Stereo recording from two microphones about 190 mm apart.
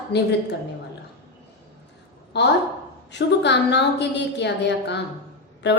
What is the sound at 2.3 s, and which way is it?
A woman's voice, 65° left (ahead or behind).